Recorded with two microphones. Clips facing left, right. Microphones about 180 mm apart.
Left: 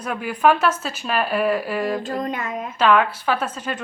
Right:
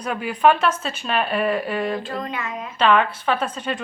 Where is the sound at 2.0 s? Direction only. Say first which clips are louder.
Left 3 dB; 45° left (ahead or behind).